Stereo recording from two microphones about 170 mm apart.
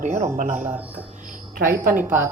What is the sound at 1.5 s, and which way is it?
Speech, 60° right (ahead or behind).